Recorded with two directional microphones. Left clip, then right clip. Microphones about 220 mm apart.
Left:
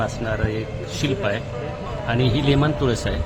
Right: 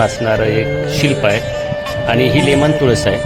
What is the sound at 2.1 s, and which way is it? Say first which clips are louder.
Speech: right 9 dB; 35° right (ahead or behind).